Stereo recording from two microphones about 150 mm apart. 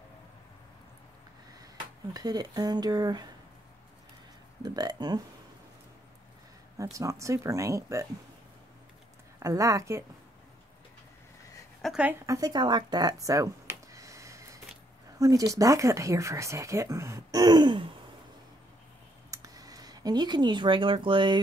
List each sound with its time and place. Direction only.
2.1 s speech: 25° right (ahead or behind)
4.6 s speech: 30° right (ahead or behind)
6.8 s speech: 20° right (ahead or behind)
9.4 s speech: 20° right (ahead or behind)
11.8 s a woman's voice: 5° right (ahead or behind)
12.3 s a sound: 25° right (ahead or behind)
15.1 s speech: 25° right (ahead or behind)
19.3 s speech: 25° right (ahead or behind)